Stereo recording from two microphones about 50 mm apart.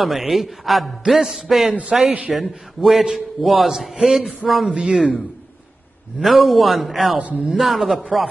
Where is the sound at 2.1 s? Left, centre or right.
Right.